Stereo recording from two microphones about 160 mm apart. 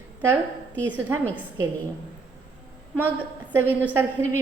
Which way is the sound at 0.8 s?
15° right (ahead or behind).